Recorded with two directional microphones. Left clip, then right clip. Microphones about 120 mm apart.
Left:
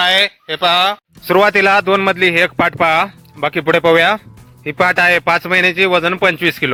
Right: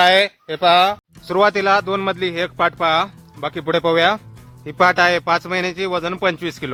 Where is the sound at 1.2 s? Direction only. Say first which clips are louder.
Left 5 dB; 45° left (ahead or behind).